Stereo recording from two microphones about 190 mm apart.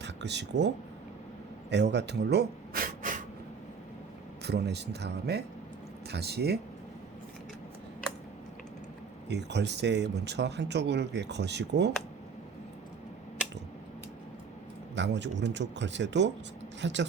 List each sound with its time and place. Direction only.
0.0 s speech: 65° right (ahead or behind)
1.7 s speech: 65° right (ahead or behind); by 3.2 s 45° right (ahead or behind)
4.4 s speech: 60° right (ahead or behind)
9.3 s speech: 65° right (ahead or behind)
14.9 s speech: 70° right (ahead or behind)